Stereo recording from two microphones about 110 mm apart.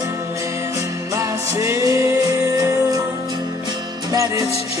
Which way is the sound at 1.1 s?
30° right (ahead or behind).